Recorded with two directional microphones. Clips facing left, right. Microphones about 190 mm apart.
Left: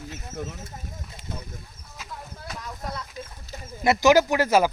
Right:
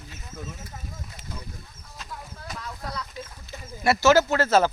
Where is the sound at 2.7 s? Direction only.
20° left (ahead or behind).